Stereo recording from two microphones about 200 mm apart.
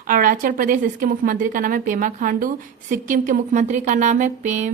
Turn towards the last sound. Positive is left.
turn(degrees=-35)  # may be behind; listen again after turning